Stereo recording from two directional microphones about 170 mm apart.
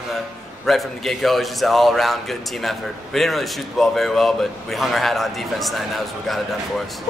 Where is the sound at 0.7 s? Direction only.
Centre (ahead or behind).